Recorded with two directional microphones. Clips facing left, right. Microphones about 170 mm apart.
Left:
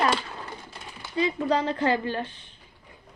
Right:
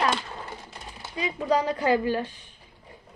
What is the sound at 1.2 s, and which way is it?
A woman's voice, 10° right (ahead or behind).